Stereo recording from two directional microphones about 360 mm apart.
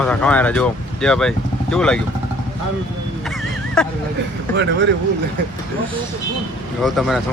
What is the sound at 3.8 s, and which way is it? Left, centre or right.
Speech, centre.